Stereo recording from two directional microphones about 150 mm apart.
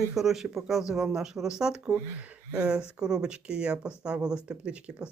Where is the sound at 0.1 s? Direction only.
Centre (ahead or behind).